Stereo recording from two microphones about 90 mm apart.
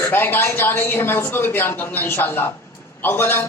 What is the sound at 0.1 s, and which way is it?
A man's voice, 25° left (ahead or behind).